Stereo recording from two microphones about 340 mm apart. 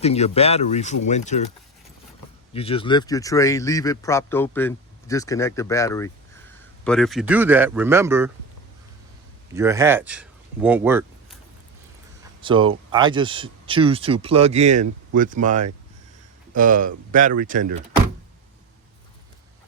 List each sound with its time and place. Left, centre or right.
0.0 s speech: centre
2.5 s speech: centre
9.6 s speech: centre
12.4 s speech: centre